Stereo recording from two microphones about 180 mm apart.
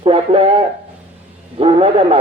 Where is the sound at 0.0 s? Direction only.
30° right (ahead or behind).